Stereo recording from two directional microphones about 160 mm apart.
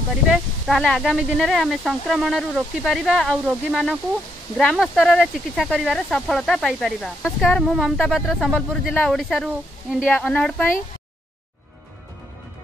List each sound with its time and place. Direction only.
0.3 s speech: centre (ahead or behind)